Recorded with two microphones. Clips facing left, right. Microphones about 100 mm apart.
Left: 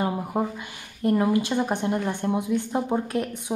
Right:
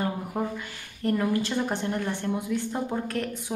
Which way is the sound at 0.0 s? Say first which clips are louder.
Left 3 dB; 15° left (ahead or behind).